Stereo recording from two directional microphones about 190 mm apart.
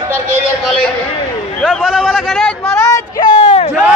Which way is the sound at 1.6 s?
5° right (ahead or behind).